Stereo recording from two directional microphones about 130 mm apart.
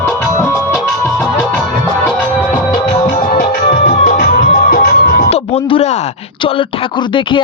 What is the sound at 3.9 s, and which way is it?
Music, 70° left (ahead or behind).